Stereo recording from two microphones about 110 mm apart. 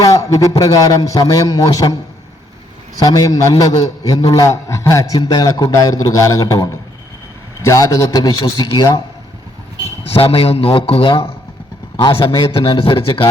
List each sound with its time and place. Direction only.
0.0 s a man's voice: 30° left (ahead or behind)
3.0 s a man's voice: 35° left (ahead or behind)
10.2 s a man's voice: 60° left (ahead or behind)
11.9 s speech: 45° left (ahead or behind)